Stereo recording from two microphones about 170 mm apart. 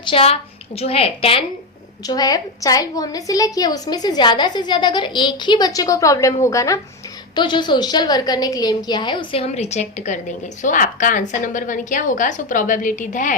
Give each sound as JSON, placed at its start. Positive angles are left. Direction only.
{"t": 0.0, "sound": "a woman's voice", "side_deg": 35}
{"t": 2.0, "sound": "a woman's voice", "side_deg": 20}